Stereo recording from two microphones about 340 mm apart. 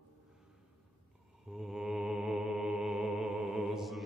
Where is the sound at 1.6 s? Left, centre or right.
Centre.